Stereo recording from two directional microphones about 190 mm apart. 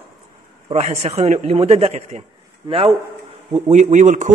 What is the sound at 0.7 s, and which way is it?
A man's voice, 35° right (ahead or behind).